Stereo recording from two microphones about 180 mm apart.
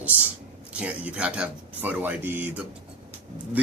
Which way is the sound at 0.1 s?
10° right (ahead or behind).